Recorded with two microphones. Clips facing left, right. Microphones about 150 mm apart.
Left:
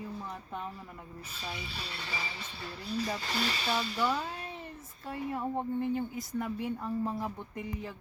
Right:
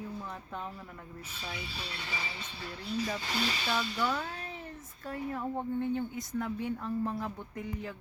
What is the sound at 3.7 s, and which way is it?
Speech, 10° left (ahead or behind).